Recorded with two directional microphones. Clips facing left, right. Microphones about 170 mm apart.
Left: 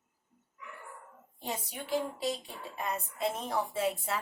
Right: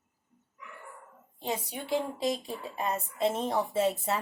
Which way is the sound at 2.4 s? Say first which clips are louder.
Right 4 dB; 30° right (ahead or behind).